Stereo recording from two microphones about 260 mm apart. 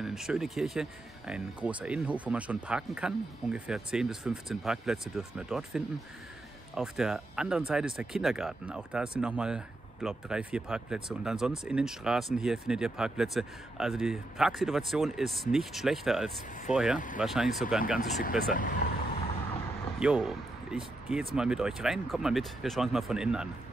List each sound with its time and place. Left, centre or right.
0.0 s speech: centre
18.5 s speech: left
20.0 s speech: centre